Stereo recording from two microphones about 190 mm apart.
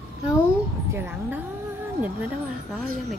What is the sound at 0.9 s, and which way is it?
Speech, 10° right (ahead or behind).